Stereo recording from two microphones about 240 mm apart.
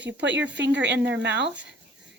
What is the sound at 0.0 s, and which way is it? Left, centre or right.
Speech, right.